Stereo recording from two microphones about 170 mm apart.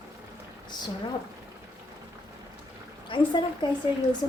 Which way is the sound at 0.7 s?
25° left (ahead or behind).